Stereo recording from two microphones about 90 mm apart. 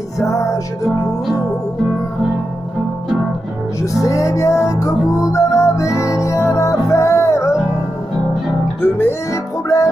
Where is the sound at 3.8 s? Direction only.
35° left (ahead or behind).